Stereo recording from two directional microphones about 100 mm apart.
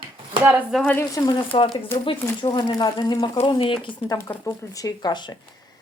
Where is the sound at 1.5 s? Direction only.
60° left (ahead or behind).